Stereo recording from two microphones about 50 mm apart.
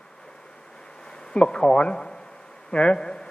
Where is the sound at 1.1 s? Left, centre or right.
Centre.